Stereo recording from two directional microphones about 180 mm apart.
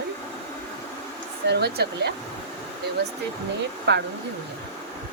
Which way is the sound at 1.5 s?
65° right (ahead or behind).